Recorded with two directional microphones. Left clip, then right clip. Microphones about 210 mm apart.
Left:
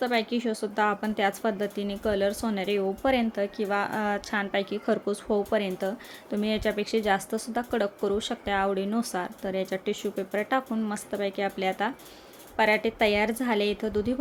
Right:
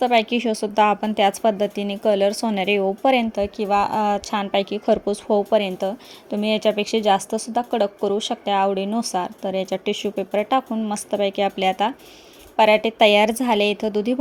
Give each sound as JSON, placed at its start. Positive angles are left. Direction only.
{"t": 0.0, "sound": "speech", "side_deg": -25}